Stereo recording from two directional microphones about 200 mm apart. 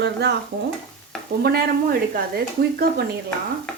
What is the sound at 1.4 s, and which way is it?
Speech, 50° right (ahead or behind).